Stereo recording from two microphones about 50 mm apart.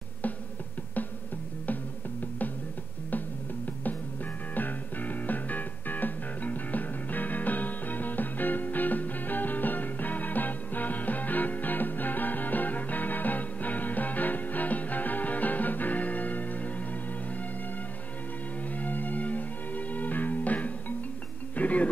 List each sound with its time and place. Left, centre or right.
4.6 s music: left
18.7 s music: left